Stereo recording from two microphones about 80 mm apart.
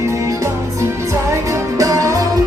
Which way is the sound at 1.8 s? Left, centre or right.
Right.